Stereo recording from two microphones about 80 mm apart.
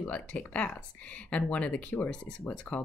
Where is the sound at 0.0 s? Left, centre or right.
Centre.